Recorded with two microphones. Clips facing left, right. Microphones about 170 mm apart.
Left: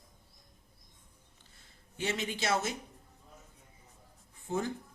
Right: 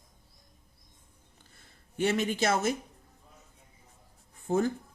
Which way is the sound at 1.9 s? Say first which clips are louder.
Right 7 dB; 50° right (ahead or behind).